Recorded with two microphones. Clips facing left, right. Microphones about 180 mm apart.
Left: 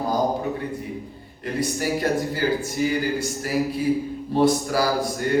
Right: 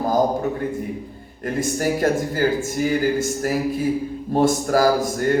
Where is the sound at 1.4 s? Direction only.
45° right (ahead or behind).